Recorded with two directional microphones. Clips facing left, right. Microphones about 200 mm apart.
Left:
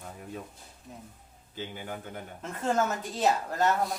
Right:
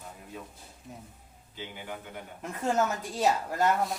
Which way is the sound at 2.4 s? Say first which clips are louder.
Even; 10° right (ahead or behind).